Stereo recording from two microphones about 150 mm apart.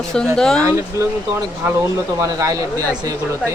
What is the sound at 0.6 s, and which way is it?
Speech, 20° right (ahead or behind).